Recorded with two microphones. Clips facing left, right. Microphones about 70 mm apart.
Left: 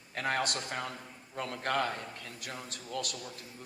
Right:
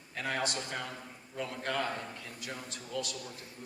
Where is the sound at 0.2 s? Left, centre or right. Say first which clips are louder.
Left 2 dB; left.